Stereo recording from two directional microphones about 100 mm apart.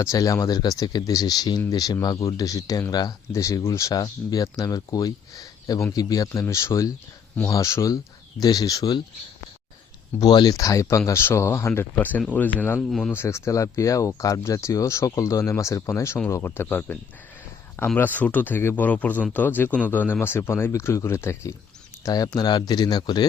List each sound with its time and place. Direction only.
0.0 s speech: 35° left (ahead or behind)
6.2 s speech: 25° left (ahead or behind)
10.2 s speech: 45° left (ahead or behind); by 21.5 s 25° left (ahead or behind)
22.0 s speech: 40° left (ahead or behind)